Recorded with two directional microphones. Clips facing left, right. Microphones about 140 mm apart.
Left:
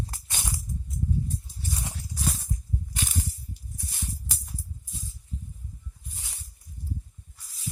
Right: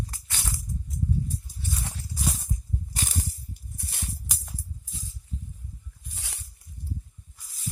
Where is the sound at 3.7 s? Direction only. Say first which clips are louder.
Even; 65° right (ahead or behind).